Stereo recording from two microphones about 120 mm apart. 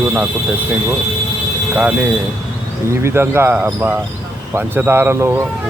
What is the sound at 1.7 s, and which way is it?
Speech, 10° right (ahead or behind).